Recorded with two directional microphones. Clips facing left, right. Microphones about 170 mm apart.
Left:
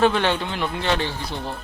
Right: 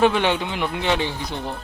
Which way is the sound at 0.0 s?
15° right (ahead or behind).